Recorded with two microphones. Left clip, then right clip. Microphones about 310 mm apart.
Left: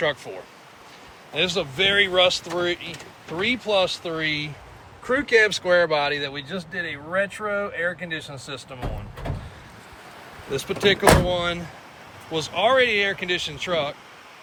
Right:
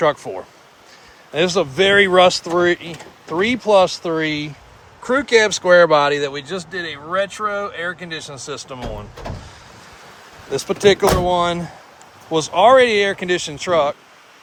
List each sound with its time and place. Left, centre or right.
0.3 s speech: right
1.3 s speech: right
10.5 s speech: right